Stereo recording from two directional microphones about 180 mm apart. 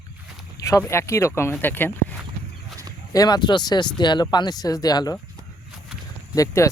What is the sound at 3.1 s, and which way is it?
Speech, 20° left (ahead or behind).